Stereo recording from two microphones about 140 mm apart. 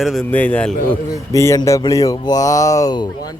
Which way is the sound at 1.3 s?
20° left (ahead or behind).